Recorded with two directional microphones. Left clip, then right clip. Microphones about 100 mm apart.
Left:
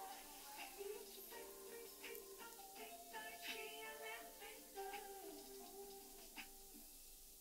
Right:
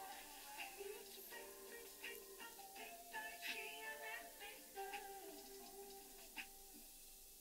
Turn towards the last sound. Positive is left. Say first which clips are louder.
# right 3 dB
turn(degrees=-25)  # may be behind; listen again after turning